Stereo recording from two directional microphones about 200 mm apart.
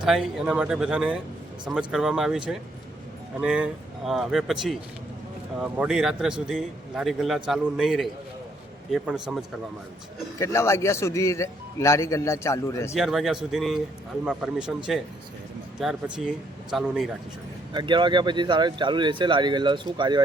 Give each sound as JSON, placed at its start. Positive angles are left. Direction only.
{"t": 0.0, "sound": "a man's voice", "side_deg": 0}
{"t": 10.3, "sound": "a man's voice", "side_deg": 15}
{"t": 12.9, "sound": "a man's voice", "side_deg": 0}
{"t": 15.8, "sound": "a man's voice", "side_deg": -5}
{"t": 17.7, "sound": "speech", "side_deg": -25}